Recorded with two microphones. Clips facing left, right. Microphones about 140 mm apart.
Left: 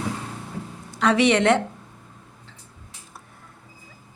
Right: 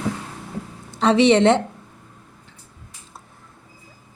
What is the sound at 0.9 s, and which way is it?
Speech, 25° right (ahead or behind).